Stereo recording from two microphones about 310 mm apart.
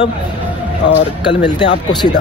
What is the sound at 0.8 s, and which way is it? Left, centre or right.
Speech, left.